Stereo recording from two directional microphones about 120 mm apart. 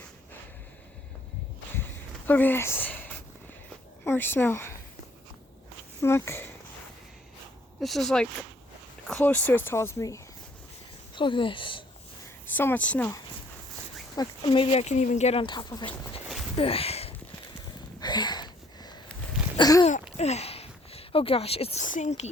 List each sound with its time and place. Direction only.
1.7 s a sound: 15° left (ahead or behind)
4.0 s speech: 20° left (ahead or behind)
6.0 s speech: 20° left (ahead or behind)
7.8 s speech: centre (ahead or behind)
9.2 s speech: 15° left (ahead or behind)
11.1 s speech: 45° left (ahead or behind)
12.5 s a woman's voice: 15° left (ahead or behind)
14.2 s speech: 45° left (ahead or behind); by 15.4 s 75° left (ahead or behind)
15.4 s speech: 40° left (ahead or behind)
16.6 s a sound: 55° left (ahead or behind)
18.0 s a sound: 35° left (ahead or behind)
19.5 s speech: 35° left (ahead or behind)
20.1 s speech: 65° left (ahead or behind); by 22.3 s 80° left